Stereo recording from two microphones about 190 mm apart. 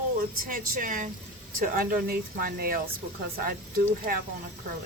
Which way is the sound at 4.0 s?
50° right (ahead or behind).